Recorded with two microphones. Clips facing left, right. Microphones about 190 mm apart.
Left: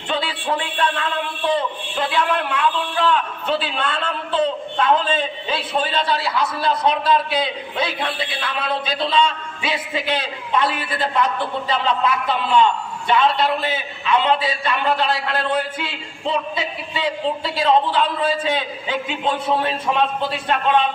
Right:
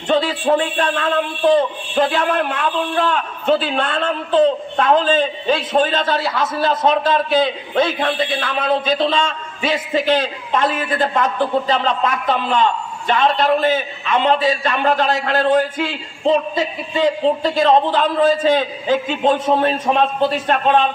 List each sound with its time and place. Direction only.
0.1 s a man's voice: 40° right (ahead or behind)